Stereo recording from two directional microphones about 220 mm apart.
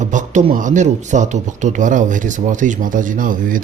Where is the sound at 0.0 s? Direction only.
35° right (ahead or behind).